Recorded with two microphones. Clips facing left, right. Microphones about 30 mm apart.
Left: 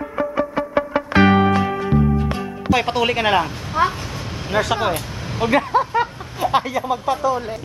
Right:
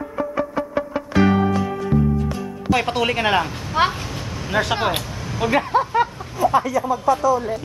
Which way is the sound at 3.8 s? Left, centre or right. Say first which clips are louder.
Even; right.